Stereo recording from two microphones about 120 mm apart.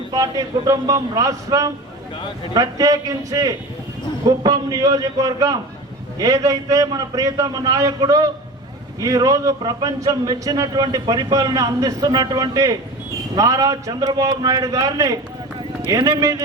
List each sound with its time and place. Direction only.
0.1 s a man's voice: 30° right (ahead or behind)